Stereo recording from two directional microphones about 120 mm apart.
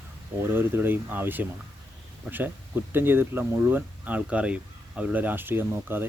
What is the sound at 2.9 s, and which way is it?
Speech, 20° right (ahead or behind).